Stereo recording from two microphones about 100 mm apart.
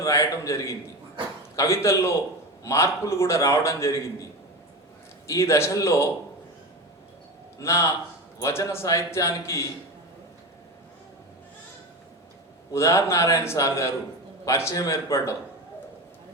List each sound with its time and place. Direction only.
0.0 s a man's voice: 30° left (ahead or behind)
5.3 s a man's voice: 30° left (ahead or behind)
7.6 s a man's voice: 30° left (ahead or behind)
12.7 s a man's voice: 30° left (ahead or behind)